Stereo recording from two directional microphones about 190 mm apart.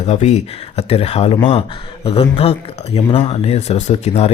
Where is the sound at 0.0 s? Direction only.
35° left (ahead or behind).